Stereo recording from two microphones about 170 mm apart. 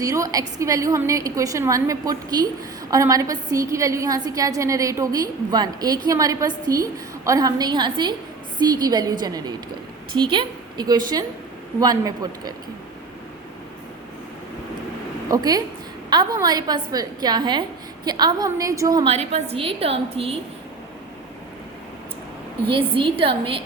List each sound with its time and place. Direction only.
0.0 s a woman's voice: 20° right (ahead or behind)
15.3 s a woman's voice: 20° right (ahead or behind)
19.0 s a woman's voice: 40° right (ahead or behind)
22.7 s a woman's voice: 30° right (ahead or behind)